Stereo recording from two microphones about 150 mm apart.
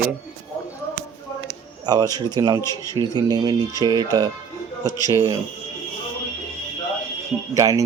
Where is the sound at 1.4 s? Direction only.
25° right (ahead or behind).